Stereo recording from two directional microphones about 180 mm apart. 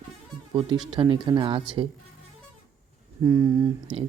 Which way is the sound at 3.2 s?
15° right (ahead or behind).